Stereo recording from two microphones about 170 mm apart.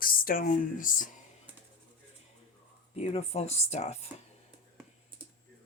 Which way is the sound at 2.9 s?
40° left (ahead or behind).